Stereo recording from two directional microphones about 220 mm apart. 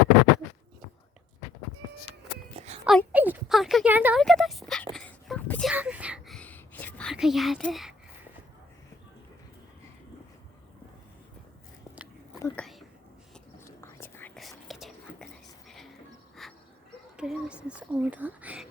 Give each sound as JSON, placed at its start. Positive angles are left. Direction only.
{"t": 2.6, "sound": "a sound", "side_deg": -25}
{"t": 2.8, "sound": "speech", "side_deg": 0}
{"t": 4.2, "sound": "a sound", "side_deg": 0}
{"t": 12.4, "sound": "whispering", "side_deg": 5}
{"t": 16.4, "sound": "dog", "side_deg": 0}
{"t": 17.2, "sound": "whispering", "side_deg": -5}